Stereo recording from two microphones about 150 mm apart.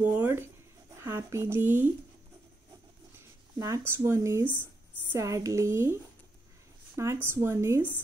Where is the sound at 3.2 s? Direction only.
20° right (ahead or behind).